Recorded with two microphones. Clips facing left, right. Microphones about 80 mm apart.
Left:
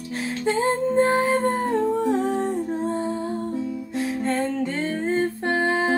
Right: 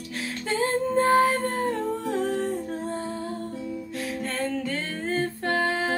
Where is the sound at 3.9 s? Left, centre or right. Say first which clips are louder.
Left 7 dB; left.